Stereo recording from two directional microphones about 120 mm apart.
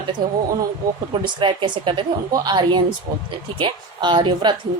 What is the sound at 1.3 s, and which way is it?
A woman's voice, 40° right (ahead or behind).